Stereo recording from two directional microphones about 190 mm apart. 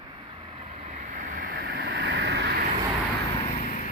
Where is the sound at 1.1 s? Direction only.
45° right (ahead or behind); by 2.5 s 65° right (ahead or behind).